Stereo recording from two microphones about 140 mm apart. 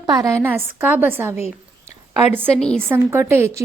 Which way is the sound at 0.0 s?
25° right (ahead or behind).